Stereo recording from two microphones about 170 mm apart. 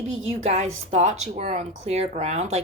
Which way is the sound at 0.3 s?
40° right (ahead or behind).